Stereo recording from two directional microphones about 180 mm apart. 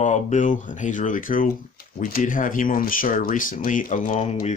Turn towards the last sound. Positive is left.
turn(degrees=40)  # may be behind; listen again after turning